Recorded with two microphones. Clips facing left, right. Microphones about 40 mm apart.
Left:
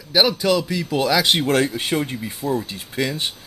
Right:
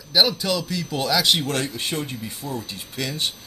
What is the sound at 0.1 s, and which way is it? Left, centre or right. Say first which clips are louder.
Speech: left 3 dB; centre.